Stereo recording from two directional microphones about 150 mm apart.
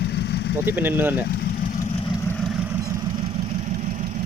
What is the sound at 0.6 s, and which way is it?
Speech, 15° right (ahead or behind).